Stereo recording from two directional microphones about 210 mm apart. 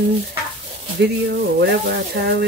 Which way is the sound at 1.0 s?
50° right (ahead or behind).